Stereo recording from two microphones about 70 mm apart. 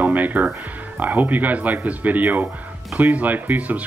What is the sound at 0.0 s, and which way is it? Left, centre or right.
Speech, right.